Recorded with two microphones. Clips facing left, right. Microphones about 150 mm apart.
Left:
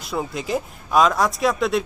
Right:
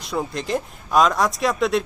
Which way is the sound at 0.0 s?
Centre (ahead or behind).